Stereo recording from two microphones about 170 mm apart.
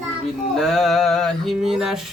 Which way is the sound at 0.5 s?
Centre (ahead or behind).